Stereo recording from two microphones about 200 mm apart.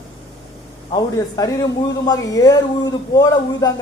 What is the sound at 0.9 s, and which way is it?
A man's voice, 15° left (ahead or behind).